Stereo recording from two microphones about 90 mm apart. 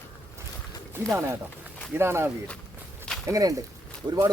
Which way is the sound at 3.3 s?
40° right (ahead or behind).